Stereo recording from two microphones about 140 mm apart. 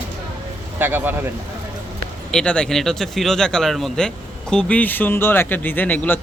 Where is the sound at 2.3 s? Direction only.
5° left (ahead or behind).